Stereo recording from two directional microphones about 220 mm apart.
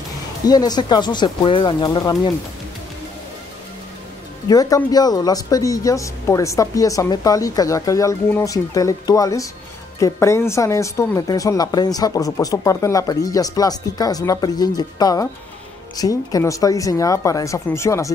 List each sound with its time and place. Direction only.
0.5 s speech: 20° left (ahead or behind)
4.5 s speech: 15° left (ahead or behind)